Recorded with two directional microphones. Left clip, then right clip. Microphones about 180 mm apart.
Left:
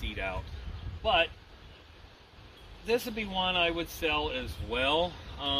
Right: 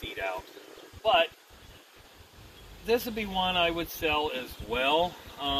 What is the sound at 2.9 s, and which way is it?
Speech, 30° right (ahead or behind).